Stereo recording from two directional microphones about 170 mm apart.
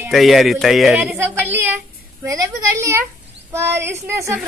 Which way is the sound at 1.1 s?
10° right (ahead or behind).